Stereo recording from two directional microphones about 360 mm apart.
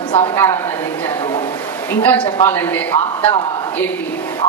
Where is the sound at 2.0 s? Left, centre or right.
Centre.